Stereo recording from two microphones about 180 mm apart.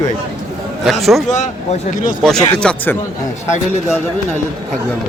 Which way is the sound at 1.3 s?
45° left (ahead or behind).